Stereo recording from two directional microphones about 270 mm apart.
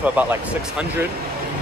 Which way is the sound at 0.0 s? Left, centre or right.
Centre.